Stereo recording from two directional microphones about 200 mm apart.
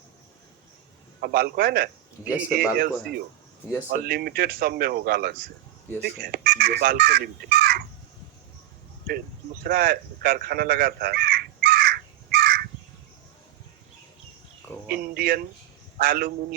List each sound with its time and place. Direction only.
1.2 s speech: 50° right (ahead or behind)
2.2 s speech: 5° right (ahead or behind)
2.7 s speech: 50° right (ahead or behind)
9.6 s crow: 50° right (ahead or behind)
14.8 s speech: 50° right (ahead or behind)